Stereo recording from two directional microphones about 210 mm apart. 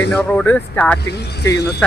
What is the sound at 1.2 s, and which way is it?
Speech, 50° left (ahead or behind).